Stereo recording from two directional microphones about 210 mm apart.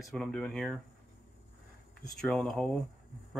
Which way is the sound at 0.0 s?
Centre (ahead or behind).